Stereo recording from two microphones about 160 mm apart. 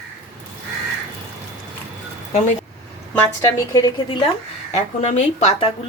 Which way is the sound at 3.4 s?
25° left (ahead or behind).